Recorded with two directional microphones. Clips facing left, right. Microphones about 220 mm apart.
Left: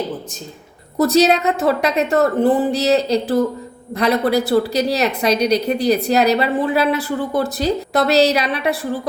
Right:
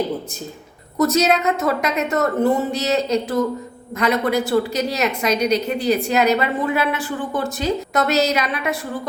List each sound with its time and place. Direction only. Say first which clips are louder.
0.9 s a woman's voice: left 3 dB; 35° left (ahead or behind)